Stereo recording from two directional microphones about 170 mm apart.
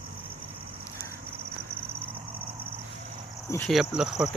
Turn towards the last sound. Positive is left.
turn(degrees=-5)  # may be behind; listen again after turning